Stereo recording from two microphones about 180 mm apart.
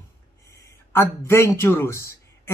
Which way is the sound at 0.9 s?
15° left (ahead or behind).